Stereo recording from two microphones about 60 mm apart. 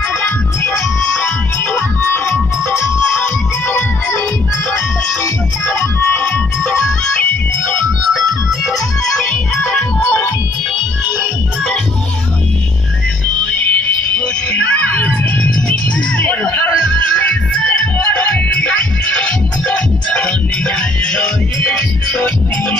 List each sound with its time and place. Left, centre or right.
0.2 s music: left
3.6 s music: left
5.8 s music: left
8.1 s music: centre
13.5 s music: left